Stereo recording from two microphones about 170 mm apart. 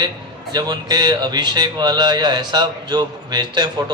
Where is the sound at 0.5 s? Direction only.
25° right (ahead or behind).